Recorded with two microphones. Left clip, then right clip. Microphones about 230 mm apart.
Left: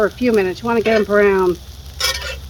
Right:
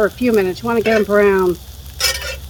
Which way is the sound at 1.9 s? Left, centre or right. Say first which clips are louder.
Right 1 dB; centre.